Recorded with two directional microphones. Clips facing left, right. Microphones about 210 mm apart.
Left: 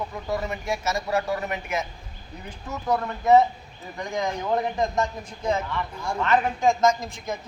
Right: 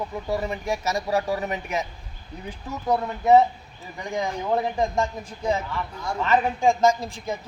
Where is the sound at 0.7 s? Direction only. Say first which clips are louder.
Right 1 dB; 35° right (ahead or behind).